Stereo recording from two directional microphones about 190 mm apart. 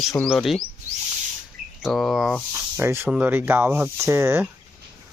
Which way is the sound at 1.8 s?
Centre (ahead or behind).